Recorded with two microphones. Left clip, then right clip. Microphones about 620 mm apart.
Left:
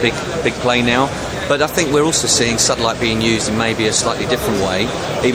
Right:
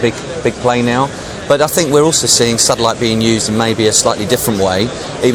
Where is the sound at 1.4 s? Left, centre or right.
Right.